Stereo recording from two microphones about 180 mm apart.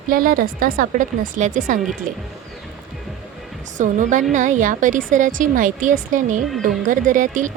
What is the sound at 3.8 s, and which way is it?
A woman's voice, 45° right (ahead or behind).